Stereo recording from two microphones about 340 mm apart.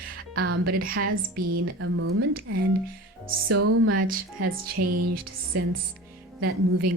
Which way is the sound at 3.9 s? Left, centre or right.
Right.